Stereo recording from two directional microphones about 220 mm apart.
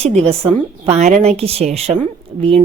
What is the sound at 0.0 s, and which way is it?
A woman's voice, 30° right (ahead or behind).